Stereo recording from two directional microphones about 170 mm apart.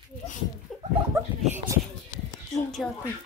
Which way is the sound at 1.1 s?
15° right (ahead or behind).